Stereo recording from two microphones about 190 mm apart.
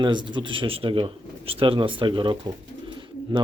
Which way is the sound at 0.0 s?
25° right (ahead or behind).